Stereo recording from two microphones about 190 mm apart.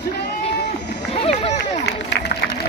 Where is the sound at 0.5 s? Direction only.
65° left (ahead or behind).